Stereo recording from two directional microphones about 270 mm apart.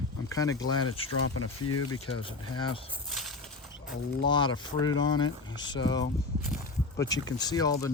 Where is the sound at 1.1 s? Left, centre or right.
Left.